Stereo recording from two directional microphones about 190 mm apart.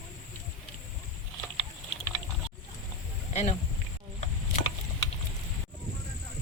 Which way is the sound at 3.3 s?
35° left (ahead or behind).